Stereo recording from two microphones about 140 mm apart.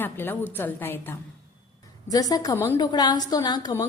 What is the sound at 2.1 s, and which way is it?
A woman's voice, 25° left (ahead or behind).